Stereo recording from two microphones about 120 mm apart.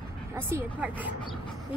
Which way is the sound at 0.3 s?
20° right (ahead or behind).